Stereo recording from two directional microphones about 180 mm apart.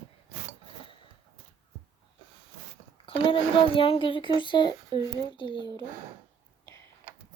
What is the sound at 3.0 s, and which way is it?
Speech, 30° left (ahead or behind).